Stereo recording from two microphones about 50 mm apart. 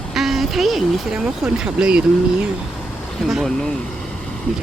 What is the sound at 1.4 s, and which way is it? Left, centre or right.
Speech, right.